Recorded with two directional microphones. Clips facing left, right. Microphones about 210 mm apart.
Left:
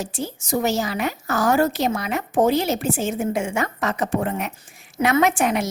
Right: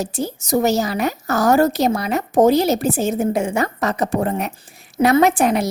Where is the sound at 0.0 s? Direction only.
40° right (ahead or behind).